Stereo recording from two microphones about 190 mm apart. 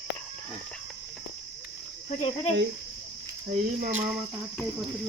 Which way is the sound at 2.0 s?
35° left (ahead or behind).